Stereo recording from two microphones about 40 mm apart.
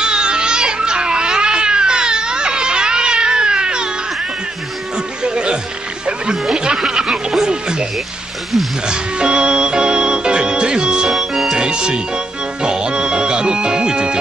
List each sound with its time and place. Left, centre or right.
0.0 s cat: right
4.9 s a sound: right
6.3 s music: centre
8.8 s music: right
11.1 s music: centre
11.5 s music: right